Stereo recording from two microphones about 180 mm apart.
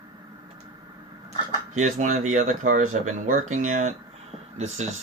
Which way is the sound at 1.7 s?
45° right (ahead or behind).